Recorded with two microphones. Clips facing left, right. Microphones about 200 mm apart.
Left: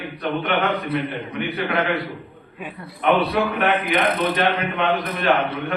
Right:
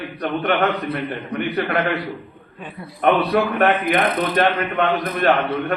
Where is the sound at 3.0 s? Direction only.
50° right (ahead or behind).